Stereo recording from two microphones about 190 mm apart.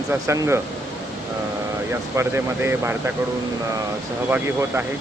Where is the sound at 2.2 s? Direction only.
15° right (ahead or behind).